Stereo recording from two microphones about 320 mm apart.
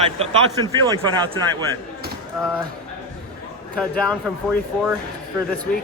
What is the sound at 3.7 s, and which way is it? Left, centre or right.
Speech, centre.